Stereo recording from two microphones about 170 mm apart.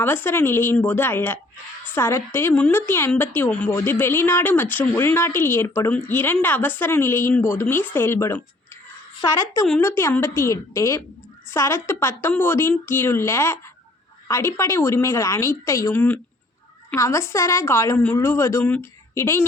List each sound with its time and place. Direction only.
0.0 s a woman's voice: 10° left (ahead or behind)
9.8 s a woman's voice: 15° left (ahead or behind)